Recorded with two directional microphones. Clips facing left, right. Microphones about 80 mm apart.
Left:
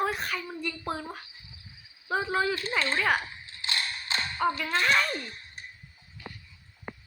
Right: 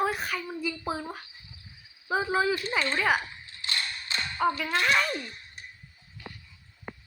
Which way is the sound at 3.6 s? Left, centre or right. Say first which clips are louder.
Left 1 dB; left.